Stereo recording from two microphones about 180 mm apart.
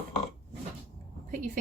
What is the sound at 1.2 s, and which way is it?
Speech, 45° right (ahead or behind).